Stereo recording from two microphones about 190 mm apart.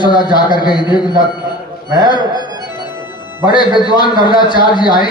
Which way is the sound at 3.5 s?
25° left (ahead or behind).